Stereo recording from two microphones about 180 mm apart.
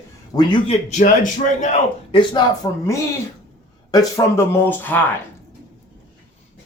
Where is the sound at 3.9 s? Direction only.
20° left (ahead or behind).